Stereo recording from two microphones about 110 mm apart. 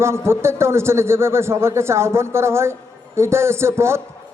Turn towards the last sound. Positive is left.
turn(degrees=-25)  # may be behind; listen again after turning